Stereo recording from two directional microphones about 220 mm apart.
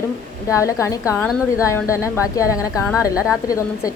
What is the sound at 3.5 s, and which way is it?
Speech, 15° left (ahead or behind).